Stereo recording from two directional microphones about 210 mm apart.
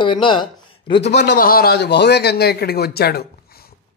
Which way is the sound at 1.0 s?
55° left (ahead or behind).